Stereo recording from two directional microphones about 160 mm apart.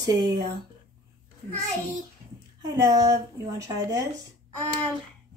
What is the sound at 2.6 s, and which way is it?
A woman's voice, 25° right (ahead or behind).